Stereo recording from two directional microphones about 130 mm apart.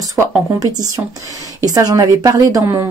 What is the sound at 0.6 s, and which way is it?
Speech, 30° right (ahead or behind).